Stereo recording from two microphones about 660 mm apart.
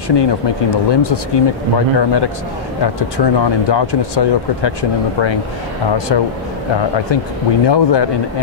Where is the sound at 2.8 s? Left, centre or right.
Left.